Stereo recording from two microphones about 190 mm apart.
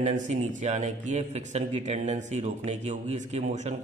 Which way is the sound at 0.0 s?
35° right (ahead or behind).